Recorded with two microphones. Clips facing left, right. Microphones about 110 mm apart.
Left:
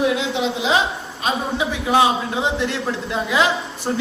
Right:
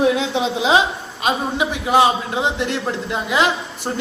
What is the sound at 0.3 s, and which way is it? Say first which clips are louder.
Speech: right 3 dB; 25° right (ahead or behind).